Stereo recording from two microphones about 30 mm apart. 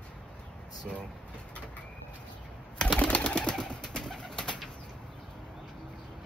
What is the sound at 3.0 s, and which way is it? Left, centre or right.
Pigeon, left.